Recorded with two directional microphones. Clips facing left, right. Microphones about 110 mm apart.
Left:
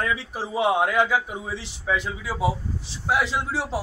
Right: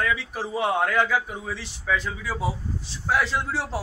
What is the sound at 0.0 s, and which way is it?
A man's voice, 30° left (ahead or behind).